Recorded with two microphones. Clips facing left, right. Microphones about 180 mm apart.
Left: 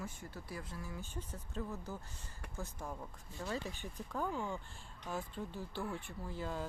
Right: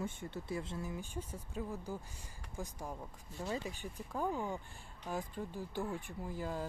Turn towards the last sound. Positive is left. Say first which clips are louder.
# right 2 dB
turn(degrees=-10)  # may be behind; listen again after turning